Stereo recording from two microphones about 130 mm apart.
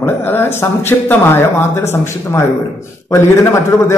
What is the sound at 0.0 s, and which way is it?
Speech, 15° left (ahead or behind).